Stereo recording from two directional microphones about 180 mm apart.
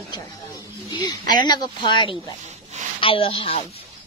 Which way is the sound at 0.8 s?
25° left (ahead or behind).